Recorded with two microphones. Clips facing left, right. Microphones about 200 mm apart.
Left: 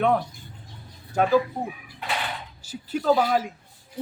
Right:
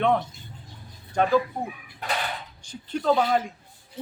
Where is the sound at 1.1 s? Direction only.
5° left (ahead or behind).